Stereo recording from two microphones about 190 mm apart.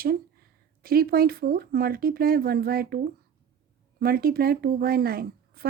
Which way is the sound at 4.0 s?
50° right (ahead or behind).